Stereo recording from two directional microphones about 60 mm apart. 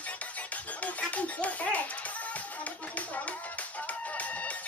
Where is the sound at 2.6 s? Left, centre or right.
Left.